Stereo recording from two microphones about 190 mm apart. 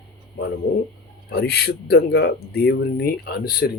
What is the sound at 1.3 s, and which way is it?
Speech, 55° left (ahead or behind).